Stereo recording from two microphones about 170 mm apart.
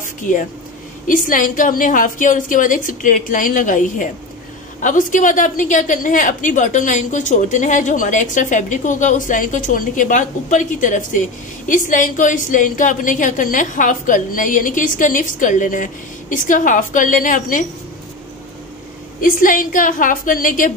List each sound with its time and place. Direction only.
0.0 s a sound: 50° left (ahead or behind)
1.0 s a woman's voice: 55° left (ahead or behind)
19.2 s a woman's voice: 55° left (ahead or behind)